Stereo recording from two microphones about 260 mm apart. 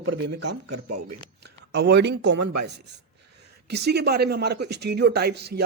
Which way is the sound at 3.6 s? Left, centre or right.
Right.